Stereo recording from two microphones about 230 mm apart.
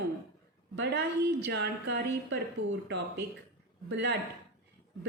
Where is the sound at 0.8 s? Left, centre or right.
Right.